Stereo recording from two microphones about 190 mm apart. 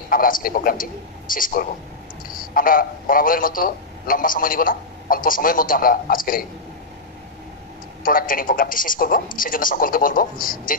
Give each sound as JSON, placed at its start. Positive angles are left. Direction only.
{"t": 0.1, "sound": "a man's voice", "side_deg": 50}
{"t": 8.0, "sound": "a man's voice", "side_deg": 45}